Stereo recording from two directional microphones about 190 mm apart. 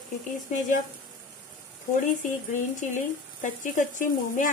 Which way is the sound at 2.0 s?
40° left (ahead or behind).